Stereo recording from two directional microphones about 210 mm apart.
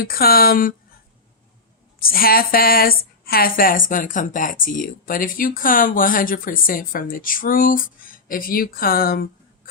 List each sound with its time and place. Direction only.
0.0 s speech: 45° left (ahead or behind)
2.0 s a woman's voice: 45° left (ahead or behind)